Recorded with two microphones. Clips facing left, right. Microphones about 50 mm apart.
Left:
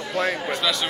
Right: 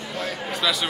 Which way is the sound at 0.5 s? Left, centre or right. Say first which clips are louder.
Even; centre.